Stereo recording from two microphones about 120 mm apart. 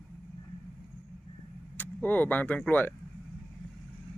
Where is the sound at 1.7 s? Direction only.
15° left (ahead or behind).